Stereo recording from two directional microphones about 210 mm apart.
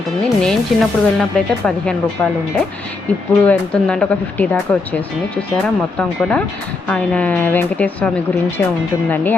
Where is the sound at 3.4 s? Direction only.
5° left (ahead or behind).